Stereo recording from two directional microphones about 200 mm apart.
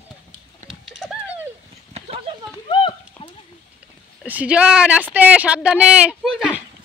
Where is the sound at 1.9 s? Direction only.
30° right (ahead or behind).